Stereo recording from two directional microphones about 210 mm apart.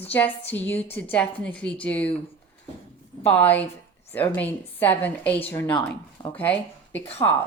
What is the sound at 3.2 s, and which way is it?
Speech, 10° left (ahead or behind).